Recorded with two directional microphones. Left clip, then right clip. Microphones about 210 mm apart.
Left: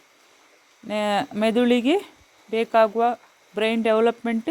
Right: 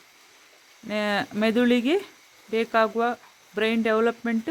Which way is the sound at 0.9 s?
10° left (ahead or behind).